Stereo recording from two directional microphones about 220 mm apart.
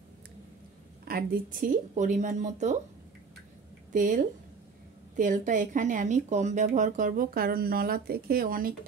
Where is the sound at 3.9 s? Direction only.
35° right (ahead or behind).